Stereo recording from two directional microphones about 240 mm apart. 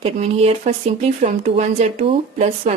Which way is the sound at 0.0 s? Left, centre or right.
Right.